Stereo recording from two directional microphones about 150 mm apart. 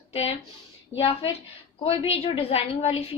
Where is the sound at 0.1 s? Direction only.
40° left (ahead or behind).